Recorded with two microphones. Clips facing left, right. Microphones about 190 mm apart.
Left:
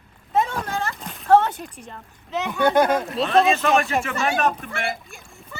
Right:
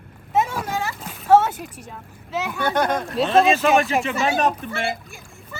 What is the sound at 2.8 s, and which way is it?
Speech, 5° left (ahead or behind).